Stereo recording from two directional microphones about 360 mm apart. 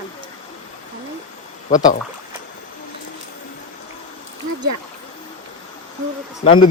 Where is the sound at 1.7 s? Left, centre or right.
Left.